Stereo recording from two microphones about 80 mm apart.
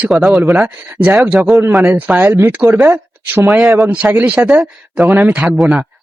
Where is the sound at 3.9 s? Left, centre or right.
Centre.